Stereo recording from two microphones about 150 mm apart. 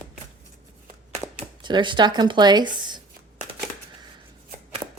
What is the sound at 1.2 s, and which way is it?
Speech, 30° right (ahead or behind).